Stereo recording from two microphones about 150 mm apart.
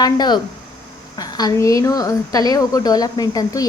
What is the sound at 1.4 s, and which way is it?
A woman's voice, 25° left (ahead or behind).